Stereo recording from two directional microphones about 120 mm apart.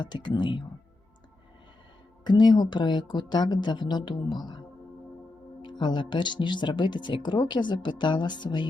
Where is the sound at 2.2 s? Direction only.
35° left (ahead or behind).